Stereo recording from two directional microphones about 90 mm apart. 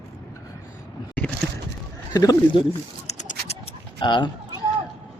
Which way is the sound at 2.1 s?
45° left (ahead or behind).